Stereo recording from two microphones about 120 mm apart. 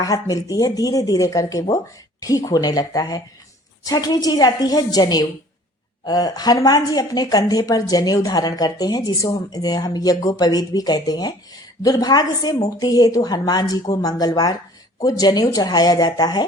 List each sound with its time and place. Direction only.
0.0 s a woman's voice: 30° left (ahead or behind)